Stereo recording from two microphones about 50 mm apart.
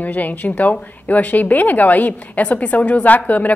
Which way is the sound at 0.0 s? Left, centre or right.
Left.